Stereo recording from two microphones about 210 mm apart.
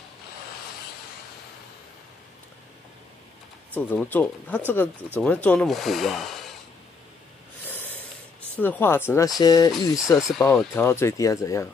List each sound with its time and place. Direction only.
3.7 s speech: 10° left (ahead or behind)
8.5 s speech: 10° left (ahead or behind)